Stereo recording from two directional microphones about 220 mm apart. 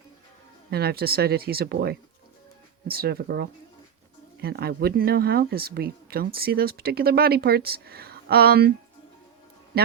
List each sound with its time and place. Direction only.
0.7 s speech: 45° right (ahead or behind)